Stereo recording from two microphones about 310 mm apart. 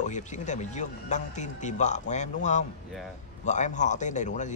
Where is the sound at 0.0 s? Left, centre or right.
Left.